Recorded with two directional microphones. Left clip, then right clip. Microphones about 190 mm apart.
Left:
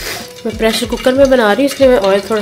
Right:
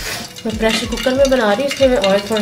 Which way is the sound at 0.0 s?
45° left (ahead or behind).